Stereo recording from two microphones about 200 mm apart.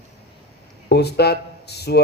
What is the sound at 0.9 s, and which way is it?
Speech, 55° left (ahead or behind).